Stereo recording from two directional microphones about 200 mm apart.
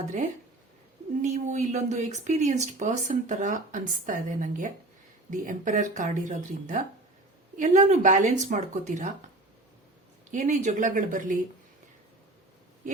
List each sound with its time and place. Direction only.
1.2 s speech: 35° right (ahead or behind)
10.3 s speech: 40° right (ahead or behind)
12.8 s a sound: 40° right (ahead or behind)